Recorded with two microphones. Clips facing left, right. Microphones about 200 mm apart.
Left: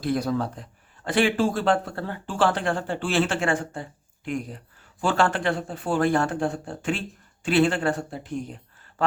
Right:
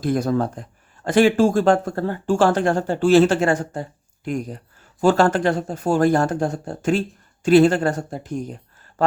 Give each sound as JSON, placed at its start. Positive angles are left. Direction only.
{"t": 0.0, "sound": "speech", "side_deg": -50}